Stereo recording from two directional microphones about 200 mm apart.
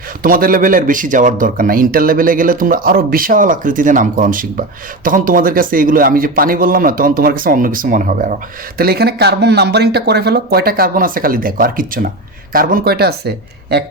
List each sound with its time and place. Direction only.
0.2 s speech: 45° right (ahead or behind)
8.8 s speech: 50° right (ahead or behind)